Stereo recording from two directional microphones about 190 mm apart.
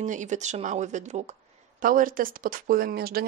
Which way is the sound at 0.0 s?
40° right (ahead or behind).